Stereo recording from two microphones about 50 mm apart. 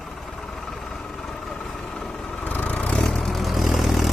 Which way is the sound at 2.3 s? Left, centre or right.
Left.